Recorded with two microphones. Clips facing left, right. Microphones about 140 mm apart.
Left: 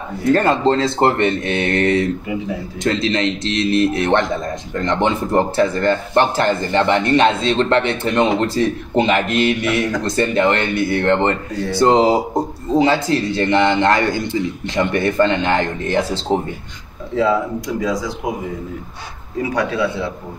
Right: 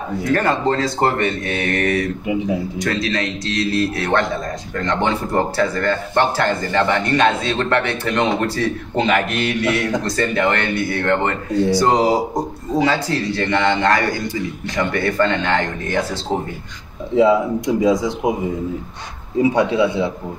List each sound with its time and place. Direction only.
0.2 s speech: 25° left (ahead or behind)
17.1 s speech: 20° right (ahead or behind)
19.5 s speech: 20° right (ahead or behind)